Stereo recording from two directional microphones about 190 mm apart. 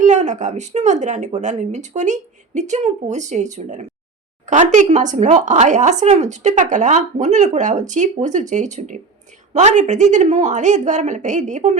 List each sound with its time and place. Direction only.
0.0 s speech: 40° right (ahead or behind)